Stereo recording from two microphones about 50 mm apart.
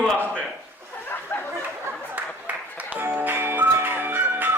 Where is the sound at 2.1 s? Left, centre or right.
Right.